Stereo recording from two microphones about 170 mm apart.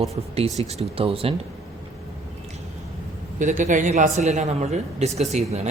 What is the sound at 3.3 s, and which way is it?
A man's voice, 45° right (ahead or behind).